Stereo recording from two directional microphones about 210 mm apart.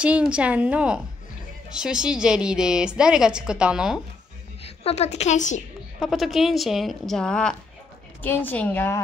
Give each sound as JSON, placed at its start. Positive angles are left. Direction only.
{"t": 0.0, "sound": "a woman's voice", "side_deg": -5}
{"t": 4.6, "sound": "a woman's voice", "side_deg": 30}
{"t": 5.9, "sound": "a woman's voice", "side_deg": 0}